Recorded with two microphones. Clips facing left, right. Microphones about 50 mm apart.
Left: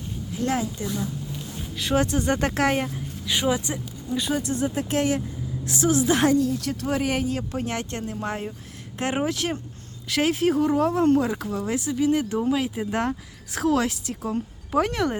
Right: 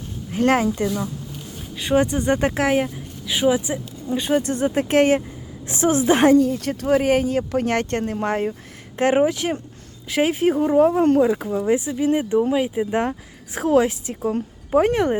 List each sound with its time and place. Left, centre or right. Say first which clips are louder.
0.3 s speech: right 8 dB; right
1.8 s speech: right 4 dB; centre
2.6 s speech: right 3 dB; centre
4.1 s speech: right 5 dB; right
6.3 s speech: right 6 dB; right
9.1 s speech: right 7 dB; right